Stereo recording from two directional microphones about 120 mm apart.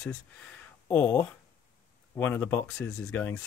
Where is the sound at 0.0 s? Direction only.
5° left (ahead or behind).